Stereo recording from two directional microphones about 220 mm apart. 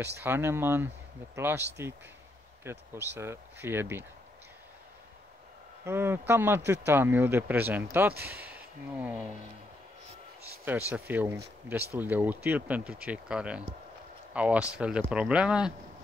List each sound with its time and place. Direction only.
0.2 s speech: 10° right (ahead or behind)
5.9 s speech: 10° right (ahead or behind)
8.1 s speech: 45° right (ahead or behind)
8.4 s speech: 5° right (ahead or behind)
10.9 s speech: 10° right (ahead or behind)